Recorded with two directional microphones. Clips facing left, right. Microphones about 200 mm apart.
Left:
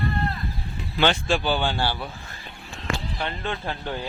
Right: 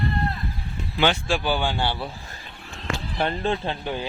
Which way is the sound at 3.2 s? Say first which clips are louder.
Right 5 dB; 35° right (ahead or behind).